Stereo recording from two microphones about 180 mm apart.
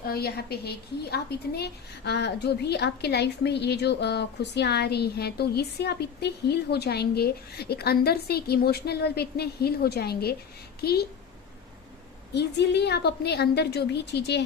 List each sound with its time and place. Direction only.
0.0 s a woman's voice: 60° left (ahead or behind)
12.3 s a woman's voice: 70° left (ahead or behind)